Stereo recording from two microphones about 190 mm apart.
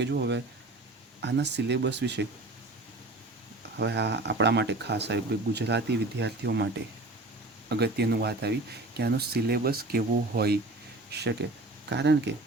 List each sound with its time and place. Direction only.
0.0 s speech: 65° right (ahead or behind)
3.8 s speech: 65° right (ahead or behind)
7.7 s speech: 60° right (ahead or behind)